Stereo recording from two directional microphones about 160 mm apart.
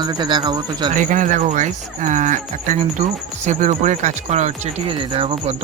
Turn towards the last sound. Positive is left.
turn(degrees=-35)  # may be behind; listen again after turning